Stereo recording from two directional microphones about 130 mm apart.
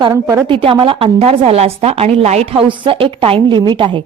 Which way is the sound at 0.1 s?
20° right (ahead or behind).